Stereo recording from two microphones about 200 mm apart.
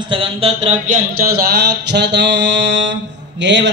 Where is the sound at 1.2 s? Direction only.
50° right (ahead or behind).